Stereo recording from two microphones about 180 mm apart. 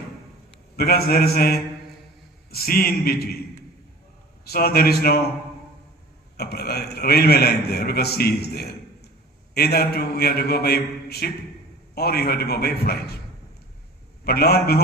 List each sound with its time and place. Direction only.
0.7 s a man's voice: 60° left (ahead or behind)
4.5 s a man's voice: 60° left (ahead or behind)
6.3 s a man's voice: 60° left (ahead or behind)
14.2 s a man's voice: 60° left (ahead or behind)